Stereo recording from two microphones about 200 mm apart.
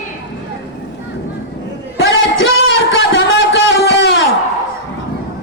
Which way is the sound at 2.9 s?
65° left (ahead or behind).